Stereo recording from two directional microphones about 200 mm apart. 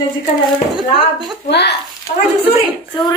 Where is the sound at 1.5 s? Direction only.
55° left (ahead or behind).